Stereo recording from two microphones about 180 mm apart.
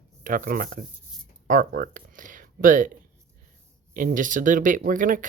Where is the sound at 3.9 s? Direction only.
50° right (ahead or behind).